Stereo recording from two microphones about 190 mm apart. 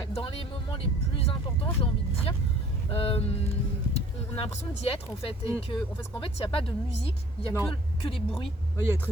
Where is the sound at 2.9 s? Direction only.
30° left (ahead or behind).